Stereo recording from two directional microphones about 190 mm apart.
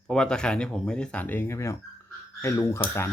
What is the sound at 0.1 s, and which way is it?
Speech, 5° left (ahead or behind).